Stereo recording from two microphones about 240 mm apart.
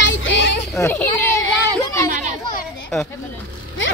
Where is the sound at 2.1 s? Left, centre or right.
Right.